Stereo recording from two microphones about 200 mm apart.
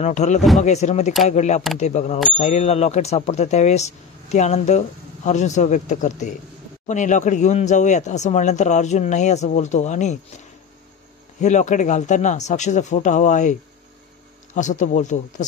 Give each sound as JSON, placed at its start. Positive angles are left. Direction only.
{"t": 0.0, "sound": "speech", "side_deg": 35}
{"t": 11.4, "sound": "speech", "side_deg": 35}